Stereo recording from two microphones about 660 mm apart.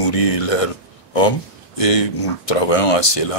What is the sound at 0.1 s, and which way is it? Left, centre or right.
Speech, left.